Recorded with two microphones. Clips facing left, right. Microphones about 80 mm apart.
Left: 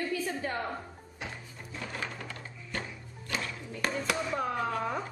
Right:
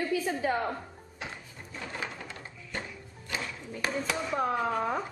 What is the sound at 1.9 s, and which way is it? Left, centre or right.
Music, centre.